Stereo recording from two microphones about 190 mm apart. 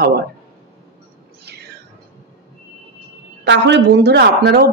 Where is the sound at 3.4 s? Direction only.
65° right (ahead or behind).